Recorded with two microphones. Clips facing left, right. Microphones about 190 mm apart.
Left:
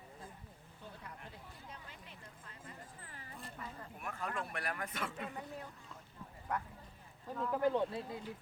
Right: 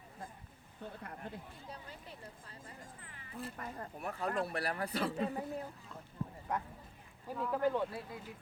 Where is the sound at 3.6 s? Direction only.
55° right (ahead or behind).